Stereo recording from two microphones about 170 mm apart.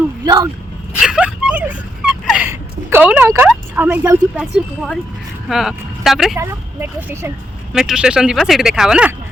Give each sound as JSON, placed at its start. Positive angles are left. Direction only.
{"t": 0.3, "sound": "speech", "side_deg": -20}
{"t": 0.9, "sound": "a sound", "side_deg": -5}
{"t": 2.5, "sound": "speech", "side_deg": -10}
{"t": 5.5, "sound": "speech", "side_deg": 0}
{"t": 6.3, "sound": "speech", "side_deg": -15}
{"t": 7.7, "sound": "speech", "side_deg": -5}